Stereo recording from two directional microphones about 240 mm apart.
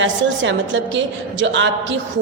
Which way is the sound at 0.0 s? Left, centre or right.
Right.